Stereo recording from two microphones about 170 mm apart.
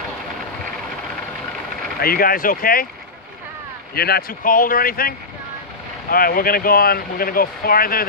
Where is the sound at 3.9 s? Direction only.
65° left (ahead or behind).